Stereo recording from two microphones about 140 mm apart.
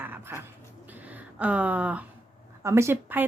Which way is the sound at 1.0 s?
10° right (ahead or behind).